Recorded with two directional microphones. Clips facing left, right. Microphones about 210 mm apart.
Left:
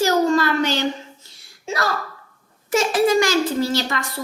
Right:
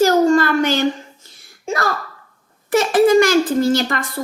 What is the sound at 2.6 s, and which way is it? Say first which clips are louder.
A woman's voice: right 4 dB; 55° right (ahead or behind).